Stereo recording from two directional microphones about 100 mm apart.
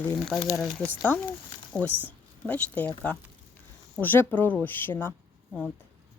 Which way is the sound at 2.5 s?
15° left (ahead or behind).